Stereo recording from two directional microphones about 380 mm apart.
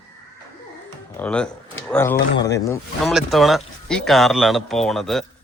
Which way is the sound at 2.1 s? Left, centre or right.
Left.